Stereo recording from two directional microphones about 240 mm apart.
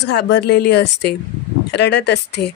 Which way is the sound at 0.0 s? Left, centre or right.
Left.